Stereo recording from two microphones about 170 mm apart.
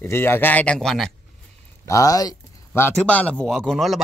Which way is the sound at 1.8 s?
20° left (ahead or behind).